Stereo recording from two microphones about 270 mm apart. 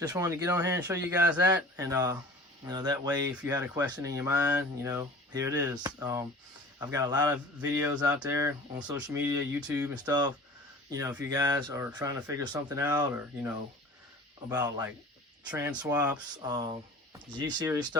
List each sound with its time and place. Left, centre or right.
0.1 s speech: centre
14.5 s speech: centre